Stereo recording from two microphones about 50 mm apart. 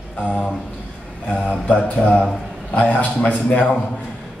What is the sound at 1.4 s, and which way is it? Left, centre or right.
Mantra, left.